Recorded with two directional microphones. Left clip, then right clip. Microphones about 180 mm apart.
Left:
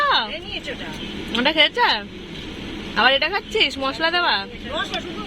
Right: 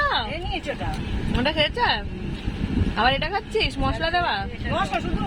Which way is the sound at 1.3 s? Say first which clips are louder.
Left 5 dB; 15° left (ahead or behind).